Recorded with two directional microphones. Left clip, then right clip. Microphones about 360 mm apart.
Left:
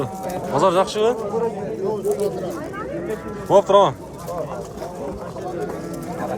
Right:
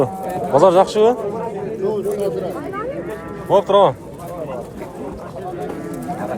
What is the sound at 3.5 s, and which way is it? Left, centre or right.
Speech, centre.